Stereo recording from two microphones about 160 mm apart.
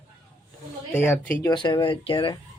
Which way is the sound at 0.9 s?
10° left (ahead or behind).